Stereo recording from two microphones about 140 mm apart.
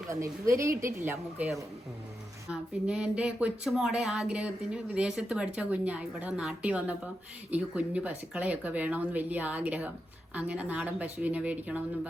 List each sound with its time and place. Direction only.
0.1 s a woman's voice: 20° right (ahead or behind)
2.5 s speech: 5° right (ahead or behind)